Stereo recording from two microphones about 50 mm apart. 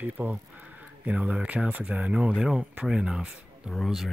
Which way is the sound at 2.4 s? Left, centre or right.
Centre.